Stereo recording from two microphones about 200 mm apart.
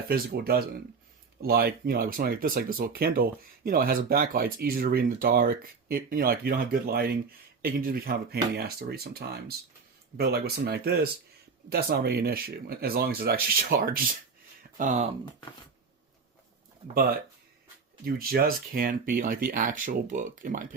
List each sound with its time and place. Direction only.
0.1 s speech: 50° right (ahead or behind)
16.9 s speech: 45° right (ahead or behind)